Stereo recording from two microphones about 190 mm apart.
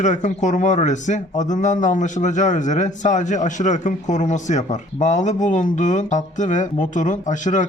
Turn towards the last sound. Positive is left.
turn(degrees=40)  # may be behind; listen again after turning